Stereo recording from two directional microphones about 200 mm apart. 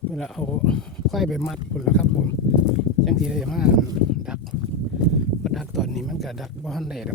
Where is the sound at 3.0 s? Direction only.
Centre (ahead or behind).